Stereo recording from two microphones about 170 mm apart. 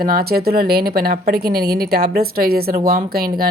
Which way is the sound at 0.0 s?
60° right (ahead or behind).